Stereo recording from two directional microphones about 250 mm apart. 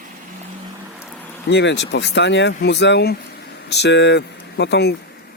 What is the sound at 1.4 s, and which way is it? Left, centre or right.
Speech, left.